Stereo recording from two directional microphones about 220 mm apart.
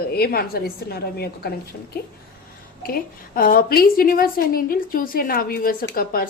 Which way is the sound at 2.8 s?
45° left (ahead or behind).